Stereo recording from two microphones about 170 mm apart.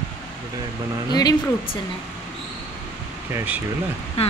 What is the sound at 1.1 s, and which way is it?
Speech, 25° left (ahead or behind).